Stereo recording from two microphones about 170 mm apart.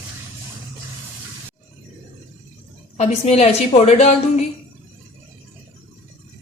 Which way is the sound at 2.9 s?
40° left (ahead or behind).